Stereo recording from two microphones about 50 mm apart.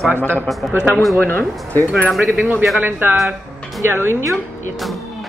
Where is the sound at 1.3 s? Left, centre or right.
Left.